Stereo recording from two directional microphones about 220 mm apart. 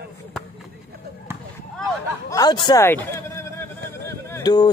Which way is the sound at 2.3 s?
15° left (ahead or behind).